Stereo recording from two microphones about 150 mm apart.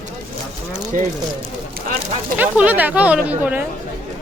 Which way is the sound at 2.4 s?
10° right (ahead or behind).